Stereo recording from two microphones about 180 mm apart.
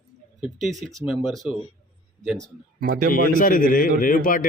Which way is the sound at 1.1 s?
Centre (ahead or behind).